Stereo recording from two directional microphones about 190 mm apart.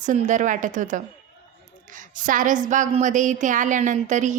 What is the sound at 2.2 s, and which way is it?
A woman's voice, 45° right (ahead or behind).